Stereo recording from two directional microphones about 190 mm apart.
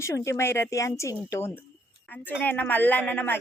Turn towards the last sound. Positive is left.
turn(degrees=10)  # may be behind; listen again after turning